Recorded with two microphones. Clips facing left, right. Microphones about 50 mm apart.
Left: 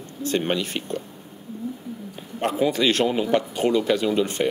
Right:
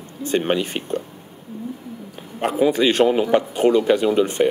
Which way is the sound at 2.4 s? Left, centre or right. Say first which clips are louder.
Right 4 dB; centre.